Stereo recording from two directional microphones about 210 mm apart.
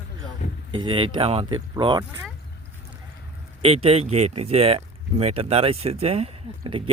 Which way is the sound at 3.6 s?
25° right (ahead or behind).